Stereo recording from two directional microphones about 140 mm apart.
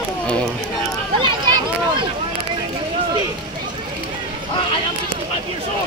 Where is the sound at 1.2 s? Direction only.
35° right (ahead or behind).